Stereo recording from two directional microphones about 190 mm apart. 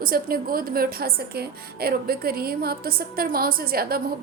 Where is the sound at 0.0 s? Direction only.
50° right (ahead or behind).